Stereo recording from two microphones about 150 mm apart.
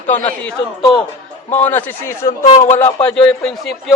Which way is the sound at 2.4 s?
50° left (ahead or behind).